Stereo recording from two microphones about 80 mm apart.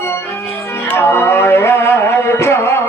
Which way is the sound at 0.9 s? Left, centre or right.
Left.